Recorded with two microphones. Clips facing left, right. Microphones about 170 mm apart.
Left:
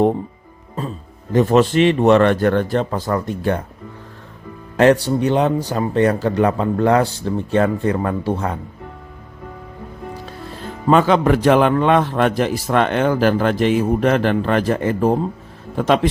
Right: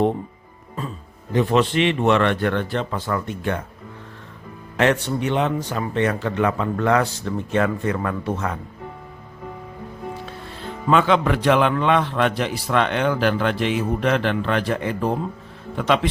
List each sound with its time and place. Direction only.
0.8 s speech: 40° left (ahead or behind)
4.8 s speech: 35° left (ahead or behind)
10.2 s speech: 40° left (ahead or behind)